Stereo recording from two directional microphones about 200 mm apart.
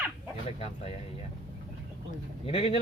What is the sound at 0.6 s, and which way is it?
Speech, 30° left (ahead or behind).